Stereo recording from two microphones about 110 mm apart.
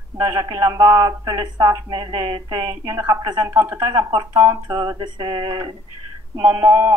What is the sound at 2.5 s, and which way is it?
Speech, 30° right (ahead or behind).